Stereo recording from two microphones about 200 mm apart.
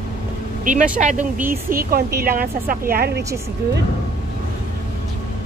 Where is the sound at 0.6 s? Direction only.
40° right (ahead or behind).